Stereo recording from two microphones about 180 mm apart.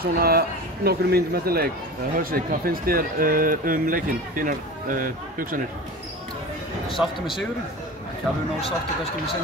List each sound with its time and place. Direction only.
0.0 s a man's voice: 55° right (ahead or behind)